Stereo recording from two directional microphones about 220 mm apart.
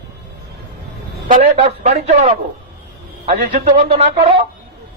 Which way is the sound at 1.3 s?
30° right (ahead or behind).